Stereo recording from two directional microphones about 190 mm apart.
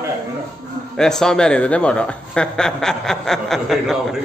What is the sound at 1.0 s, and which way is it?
Speech, 5° left (ahead or behind).